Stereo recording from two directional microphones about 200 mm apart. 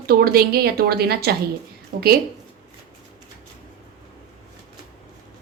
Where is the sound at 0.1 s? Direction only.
50° right (ahead or behind).